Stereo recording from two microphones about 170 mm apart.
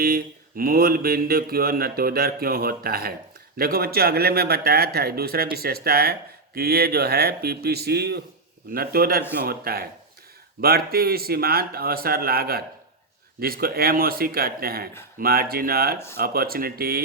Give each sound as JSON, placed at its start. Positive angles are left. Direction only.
{"t": 0.0, "sound": "speech", "side_deg": -60}